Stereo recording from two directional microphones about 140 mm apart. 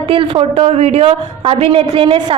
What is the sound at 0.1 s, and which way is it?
A woman's voice, 40° right (ahead or behind).